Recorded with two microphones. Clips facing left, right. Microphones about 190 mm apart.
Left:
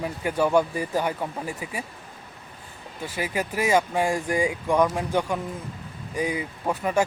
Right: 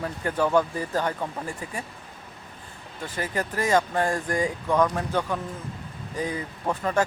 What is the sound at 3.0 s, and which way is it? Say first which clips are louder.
Speech: left 1 dB; 10° left (ahead or behind).